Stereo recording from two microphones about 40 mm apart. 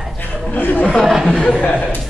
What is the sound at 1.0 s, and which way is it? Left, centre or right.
Speech, centre.